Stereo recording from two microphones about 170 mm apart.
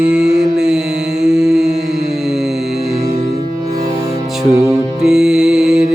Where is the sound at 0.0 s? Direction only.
5° right (ahead or behind).